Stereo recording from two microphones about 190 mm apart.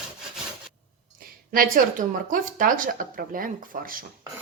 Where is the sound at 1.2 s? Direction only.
50° right (ahead or behind).